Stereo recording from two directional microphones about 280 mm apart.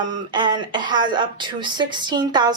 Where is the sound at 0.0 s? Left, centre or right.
Centre.